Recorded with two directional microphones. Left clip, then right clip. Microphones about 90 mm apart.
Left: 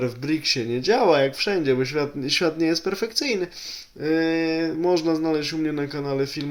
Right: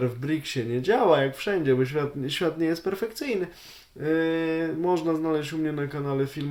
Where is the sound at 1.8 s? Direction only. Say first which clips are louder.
Left 2 dB; 30° right (ahead or behind).